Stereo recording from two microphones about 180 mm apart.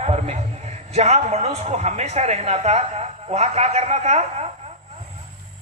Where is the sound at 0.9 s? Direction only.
40° right (ahead or behind).